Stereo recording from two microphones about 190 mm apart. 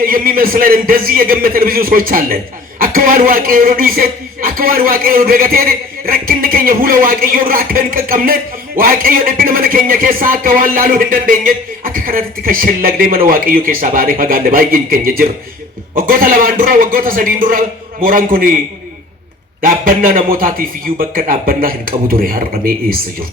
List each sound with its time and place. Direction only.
0.0 s a man's voice: 50° right (ahead or behind)
19.6 s a man's voice: 50° right (ahead or behind)